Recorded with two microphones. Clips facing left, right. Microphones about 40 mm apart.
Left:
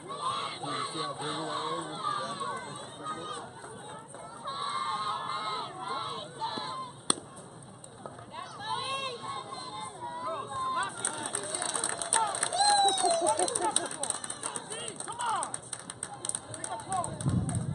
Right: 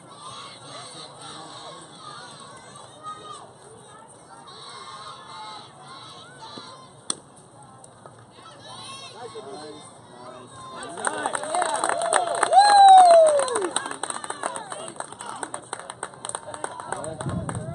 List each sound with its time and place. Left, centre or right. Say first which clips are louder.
0.2 s crowd: left 7 dB; left
4.5 s crowd: left 9 dB; left
7.1 s chop: left 3 dB; centre
8.6 s run: left 7 dB; left
10.2 s a sound: left 7 dB; left
11.0 s run: right 10 dB; right
13.9 s a sound: right 7 dB; right